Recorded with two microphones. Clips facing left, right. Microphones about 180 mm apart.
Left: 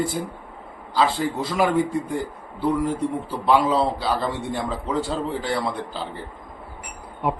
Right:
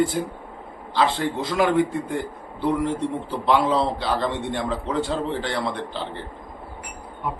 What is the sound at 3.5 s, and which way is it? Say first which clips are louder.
A man's voice: left 1 dB; 10° left (ahead or behind).